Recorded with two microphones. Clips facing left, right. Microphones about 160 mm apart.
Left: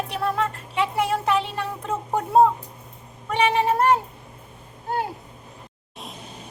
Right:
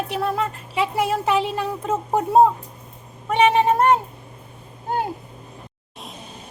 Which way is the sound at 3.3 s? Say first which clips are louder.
Right 4 dB; 20° right (ahead or behind).